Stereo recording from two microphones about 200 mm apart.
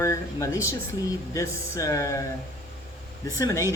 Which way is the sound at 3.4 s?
15° left (ahead or behind).